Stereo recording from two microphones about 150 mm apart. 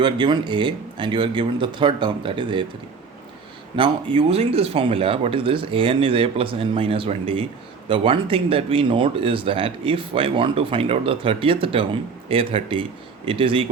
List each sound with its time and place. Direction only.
0.0 s speech: 30° right (ahead or behind)
3.8 s speech: 40° right (ahead or behind)